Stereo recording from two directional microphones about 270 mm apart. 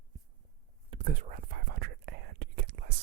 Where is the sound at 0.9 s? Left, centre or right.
Right.